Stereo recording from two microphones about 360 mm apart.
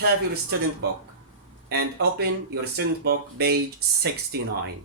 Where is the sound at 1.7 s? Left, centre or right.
Right.